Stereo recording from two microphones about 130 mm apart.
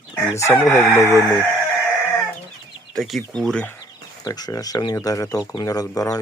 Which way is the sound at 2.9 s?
Centre (ahead or behind).